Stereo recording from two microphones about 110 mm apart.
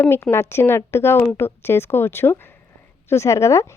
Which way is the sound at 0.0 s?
20° left (ahead or behind).